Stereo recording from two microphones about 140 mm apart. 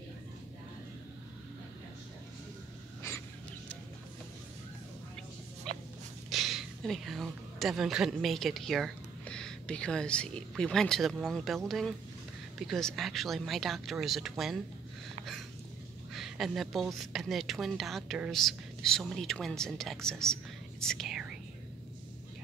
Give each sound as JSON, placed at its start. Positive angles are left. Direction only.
{"t": 5.7, "sound": "a sound", "side_deg": 5}
{"t": 6.3, "sound": "speech", "side_deg": 0}
{"t": 16.1, "sound": "speech", "side_deg": 0}